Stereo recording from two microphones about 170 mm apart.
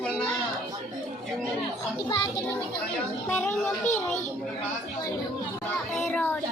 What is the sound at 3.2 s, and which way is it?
Speech, 10° left (ahead or behind).